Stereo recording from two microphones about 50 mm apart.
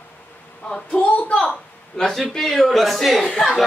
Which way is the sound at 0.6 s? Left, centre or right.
Left.